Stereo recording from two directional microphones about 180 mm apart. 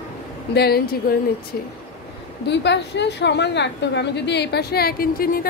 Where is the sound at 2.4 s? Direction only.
75° left (ahead or behind).